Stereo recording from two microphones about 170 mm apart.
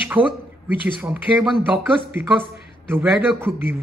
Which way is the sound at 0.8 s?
10° right (ahead or behind).